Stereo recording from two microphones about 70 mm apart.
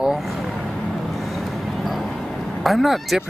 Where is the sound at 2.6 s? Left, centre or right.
Centre.